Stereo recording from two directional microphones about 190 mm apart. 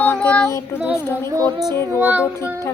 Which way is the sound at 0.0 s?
10° left (ahead or behind).